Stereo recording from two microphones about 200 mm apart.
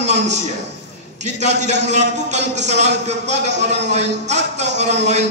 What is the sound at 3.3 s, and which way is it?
Speech, 60° right (ahead or behind).